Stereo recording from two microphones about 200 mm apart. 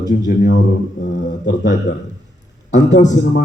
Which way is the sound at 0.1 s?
45° left (ahead or behind).